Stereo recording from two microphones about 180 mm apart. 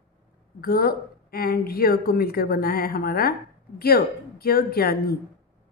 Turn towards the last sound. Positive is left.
turn(degrees=60)  # may be behind; listen again after turning